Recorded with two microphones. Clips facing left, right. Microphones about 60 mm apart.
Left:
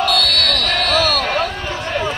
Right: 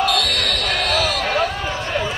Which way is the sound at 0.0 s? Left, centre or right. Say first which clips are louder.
Left 2 dB; centre.